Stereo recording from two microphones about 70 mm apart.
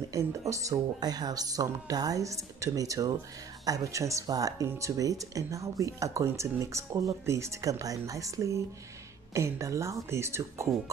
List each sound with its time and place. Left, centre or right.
0.1 s speech: right
7.8 s speech: right